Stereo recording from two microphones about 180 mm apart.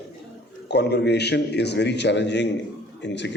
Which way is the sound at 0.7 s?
70° left (ahead or behind).